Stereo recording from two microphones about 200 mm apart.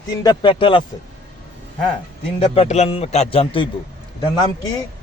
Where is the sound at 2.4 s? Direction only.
30° left (ahead or behind).